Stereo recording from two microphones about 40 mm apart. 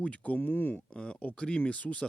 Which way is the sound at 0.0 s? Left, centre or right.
Left.